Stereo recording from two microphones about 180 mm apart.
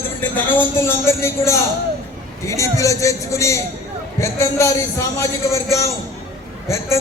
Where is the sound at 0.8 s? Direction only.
15° left (ahead or behind).